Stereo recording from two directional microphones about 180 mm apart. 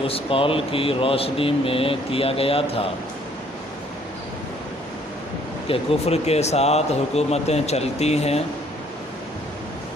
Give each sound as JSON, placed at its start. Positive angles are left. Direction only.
{"t": 0.1, "sound": "speech", "side_deg": 30}
{"t": 5.6, "sound": "speech", "side_deg": 35}